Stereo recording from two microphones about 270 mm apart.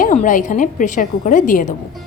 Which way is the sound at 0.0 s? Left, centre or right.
Left.